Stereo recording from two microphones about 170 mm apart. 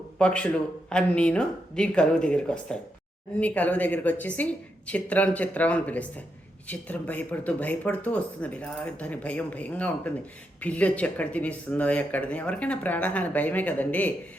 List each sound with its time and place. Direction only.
0.2 s speech: 5° left (ahead or behind)